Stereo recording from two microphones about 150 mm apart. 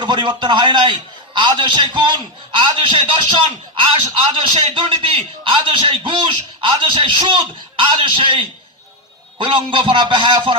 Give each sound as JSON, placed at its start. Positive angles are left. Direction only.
{"t": 0.0, "sound": "a man's voice", "side_deg": -30}